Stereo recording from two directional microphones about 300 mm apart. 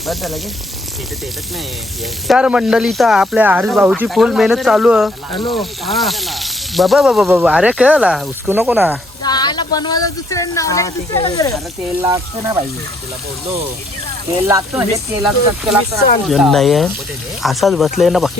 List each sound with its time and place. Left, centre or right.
0.0 s sizzle: centre
2.2 s sizzle: centre
5.3 s speech: centre
5.5 s sizzle: centre
9.2 s speech: centre
12.0 s speech: centre
14.4 s sizzle: centre